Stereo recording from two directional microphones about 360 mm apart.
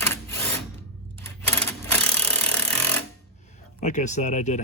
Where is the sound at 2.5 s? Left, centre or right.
Centre.